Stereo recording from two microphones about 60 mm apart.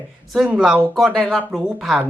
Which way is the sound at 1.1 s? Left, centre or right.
Centre.